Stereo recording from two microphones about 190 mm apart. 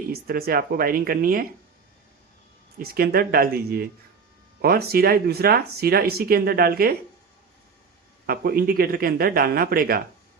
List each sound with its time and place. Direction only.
0.1 s speech: 50° right (ahead or behind)
2.7 s speech: 50° right (ahead or behind)
8.3 s speech: 50° right (ahead or behind)